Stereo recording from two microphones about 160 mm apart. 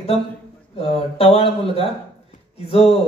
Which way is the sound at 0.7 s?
35° left (ahead or behind).